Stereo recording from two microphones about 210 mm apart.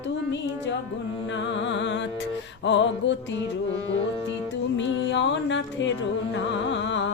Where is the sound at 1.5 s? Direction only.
60° left (ahead or behind).